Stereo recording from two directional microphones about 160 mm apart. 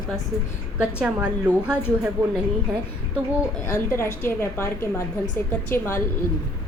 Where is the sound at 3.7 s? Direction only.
15° left (ahead or behind).